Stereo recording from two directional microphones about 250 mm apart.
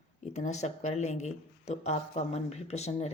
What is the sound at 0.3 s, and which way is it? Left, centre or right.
Speech, left.